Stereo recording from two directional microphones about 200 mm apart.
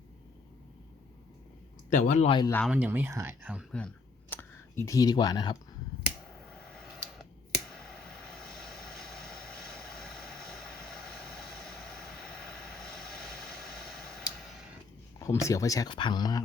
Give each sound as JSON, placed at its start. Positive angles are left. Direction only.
{"t": 1.9, "sound": "speech", "side_deg": 35}
{"t": 2.6, "sound": "speech", "side_deg": -5}
{"t": 6.7, "sound": "a sound", "side_deg": 0}
{"t": 10.8, "sound": "vehicle", "side_deg": 0}
{"t": 12.7, "sound": "a sound", "side_deg": 0}
{"t": 15.2, "sound": "speech", "side_deg": 15}